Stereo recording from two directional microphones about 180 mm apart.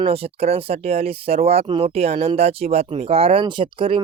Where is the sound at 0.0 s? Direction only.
35° right (ahead or behind).